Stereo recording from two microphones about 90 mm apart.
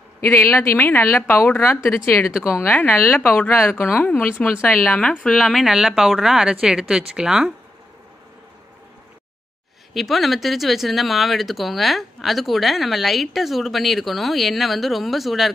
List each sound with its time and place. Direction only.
0.2 s a woman's voice: 25° left (ahead or behind)
5.4 s speech: centre (ahead or behind)
9.9 s speech: centre (ahead or behind)